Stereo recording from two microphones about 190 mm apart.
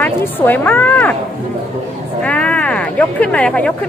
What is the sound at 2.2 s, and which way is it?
A woman's voice, 5° left (ahead or behind).